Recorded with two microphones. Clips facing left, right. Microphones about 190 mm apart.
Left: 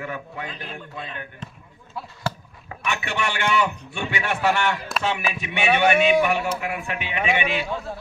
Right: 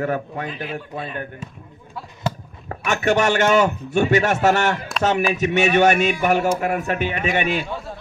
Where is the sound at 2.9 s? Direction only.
45° right (ahead or behind).